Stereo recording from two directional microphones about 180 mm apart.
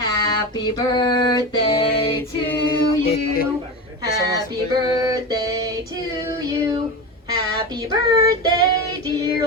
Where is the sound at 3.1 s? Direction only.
55° left (ahead or behind).